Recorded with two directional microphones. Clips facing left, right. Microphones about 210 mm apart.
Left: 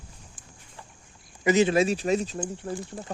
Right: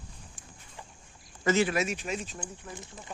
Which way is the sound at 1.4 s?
20° left (ahead or behind).